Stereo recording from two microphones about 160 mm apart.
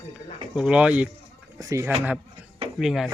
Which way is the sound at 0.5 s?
5° right (ahead or behind).